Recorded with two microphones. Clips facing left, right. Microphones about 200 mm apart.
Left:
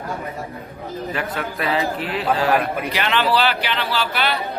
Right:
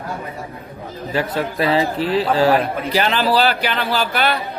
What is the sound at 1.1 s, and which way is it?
A man's voice, 30° right (ahead or behind).